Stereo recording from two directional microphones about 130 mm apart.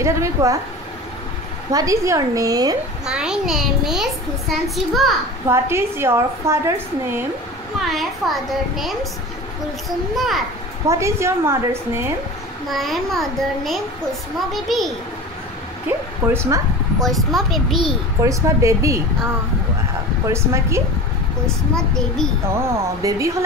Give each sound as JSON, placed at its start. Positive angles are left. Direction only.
{"t": 0.0, "sound": "a woman's voice", "side_deg": -25}
{"t": 1.7, "sound": "a woman's voice", "side_deg": -25}
{"t": 3.1, "sound": "a child's voice", "side_deg": -5}
{"t": 5.5, "sound": "a woman's voice", "side_deg": -20}
{"t": 7.8, "sound": "a child's voice", "side_deg": 0}
{"t": 10.9, "sound": "a woman's voice", "side_deg": -20}
{"t": 12.6, "sound": "a child's voice", "side_deg": 0}
{"t": 16.3, "sound": "speech", "side_deg": -25}
{"t": 17.1, "sound": "a child's voice", "side_deg": 0}
{"t": 18.2, "sound": "a woman's voice", "side_deg": -25}
{"t": 20.2, "sound": "a woman's voice", "side_deg": -20}
{"t": 21.5, "sound": "a child's voice", "side_deg": 5}
{"t": 22.5, "sound": "a woman's voice", "side_deg": -20}